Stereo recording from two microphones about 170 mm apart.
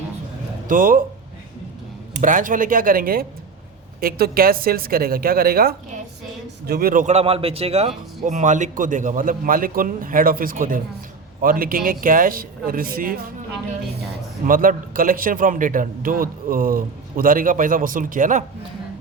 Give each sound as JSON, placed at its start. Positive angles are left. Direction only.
{"t": 0.7, "sound": "speech", "side_deg": -55}
{"t": 2.2, "sound": "a man's voice", "side_deg": -50}
{"t": 14.4, "sound": "a man's voice", "side_deg": -55}